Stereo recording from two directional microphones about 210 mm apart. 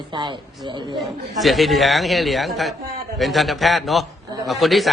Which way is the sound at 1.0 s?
Centre (ahead or behind).